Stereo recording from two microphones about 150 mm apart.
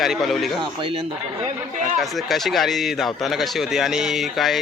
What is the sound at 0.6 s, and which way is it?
Speech, 35° right (ahead or behind).